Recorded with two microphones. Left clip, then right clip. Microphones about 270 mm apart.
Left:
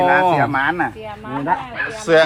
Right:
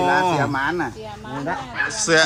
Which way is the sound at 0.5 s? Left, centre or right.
Left.